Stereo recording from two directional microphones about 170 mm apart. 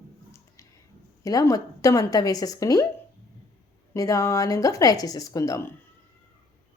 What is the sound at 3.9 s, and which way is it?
A woman's voice, 20° left (ahead or behind).